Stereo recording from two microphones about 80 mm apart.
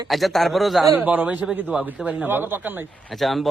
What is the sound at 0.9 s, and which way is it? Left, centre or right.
A man's voice, right.